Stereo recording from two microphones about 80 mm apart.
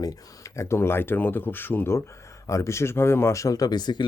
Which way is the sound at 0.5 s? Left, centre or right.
Left.